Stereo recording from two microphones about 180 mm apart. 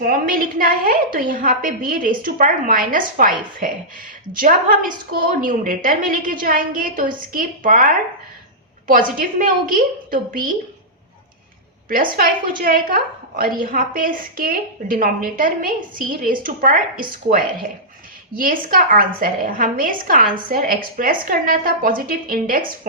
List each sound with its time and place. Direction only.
0.0 s a woman's voice: 50° right (ahead or behind)
11.9 s a woman's voice: 50° right (ahead or behind)